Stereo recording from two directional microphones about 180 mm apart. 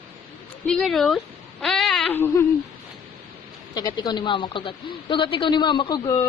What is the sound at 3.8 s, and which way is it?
A woman's voice, 25° left (ahead or behind).